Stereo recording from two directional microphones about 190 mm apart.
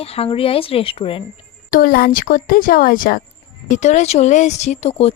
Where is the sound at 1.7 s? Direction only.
50° left (ahead or behind).